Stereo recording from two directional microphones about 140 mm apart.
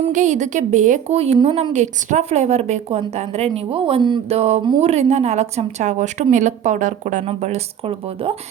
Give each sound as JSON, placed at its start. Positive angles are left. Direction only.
{"t": 0.1, "sound": "speech", "side_deg": -60}